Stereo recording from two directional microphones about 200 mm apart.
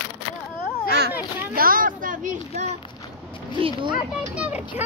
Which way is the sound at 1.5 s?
45° right (ahead or behind).